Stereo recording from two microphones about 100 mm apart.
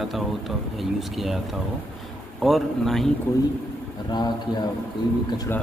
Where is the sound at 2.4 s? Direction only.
Centre (ahead or behind).